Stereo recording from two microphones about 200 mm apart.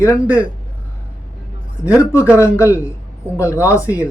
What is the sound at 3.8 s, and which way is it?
Speech, 10° right (ahead or behind).